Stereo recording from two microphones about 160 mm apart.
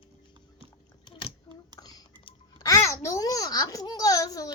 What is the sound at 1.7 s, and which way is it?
Babbling, 25° left (ahead or behind).